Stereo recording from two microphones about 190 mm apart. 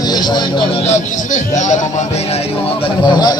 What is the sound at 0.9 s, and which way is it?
Speech, 40° left (ahead or behind).